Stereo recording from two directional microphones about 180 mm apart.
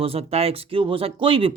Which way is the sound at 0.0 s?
35° right (ahead or behind).